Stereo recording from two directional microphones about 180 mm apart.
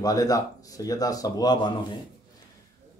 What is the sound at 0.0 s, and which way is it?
Speech, 20° left (ahead or behind).